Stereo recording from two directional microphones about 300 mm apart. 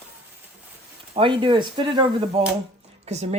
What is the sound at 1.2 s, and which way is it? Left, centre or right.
Speech, centre.